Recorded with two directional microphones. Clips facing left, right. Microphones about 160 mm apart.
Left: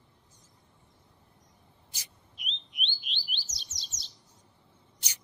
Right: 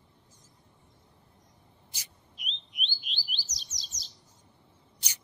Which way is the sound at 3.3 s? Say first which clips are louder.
Even; centre (ahead or behind).